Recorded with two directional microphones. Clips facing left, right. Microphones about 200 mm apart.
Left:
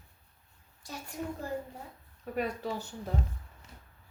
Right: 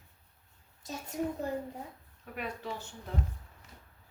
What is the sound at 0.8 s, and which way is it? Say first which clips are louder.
Speech: right 2 dB; 25° right (ahead or behind).